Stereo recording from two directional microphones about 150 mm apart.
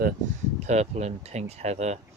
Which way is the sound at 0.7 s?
50° right (ahead or behind).